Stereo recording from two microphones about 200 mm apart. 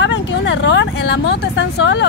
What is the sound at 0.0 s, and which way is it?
Vehicle, 65° left (ahead or behind).